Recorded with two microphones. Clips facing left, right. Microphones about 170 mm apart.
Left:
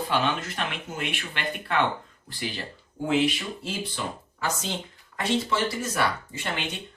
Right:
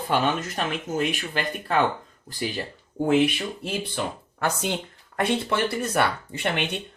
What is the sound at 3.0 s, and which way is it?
Speech, 55° right (ahead or behind).